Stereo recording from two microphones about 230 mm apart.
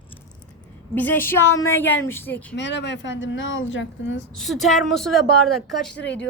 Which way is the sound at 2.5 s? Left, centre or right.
Left.